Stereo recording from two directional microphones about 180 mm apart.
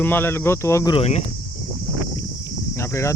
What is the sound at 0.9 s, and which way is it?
Speech, 35° left (ahead or behind).